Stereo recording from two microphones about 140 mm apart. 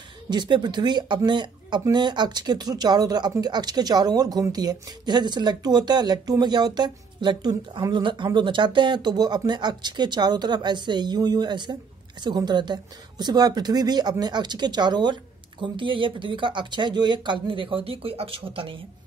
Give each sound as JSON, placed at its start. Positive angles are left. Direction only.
{"t": 0.3, "sound": "speech", "side_deg": -30}